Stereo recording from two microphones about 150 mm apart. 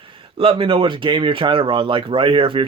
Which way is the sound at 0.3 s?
35° right (ahead or behind).